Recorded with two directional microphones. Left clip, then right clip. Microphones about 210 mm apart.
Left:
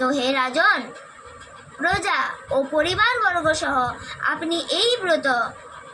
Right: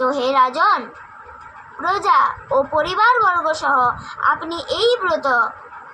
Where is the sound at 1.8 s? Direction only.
10° right (ahead or behind).